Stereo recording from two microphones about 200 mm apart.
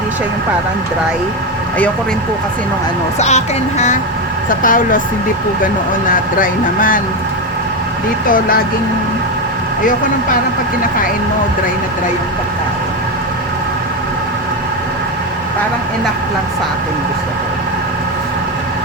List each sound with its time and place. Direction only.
3.2 s speech: 35° left (ahead or behind)
6.1 s speech: 45° left (ahead or behind)
8.3 s speech: 45° left (ahead or behind)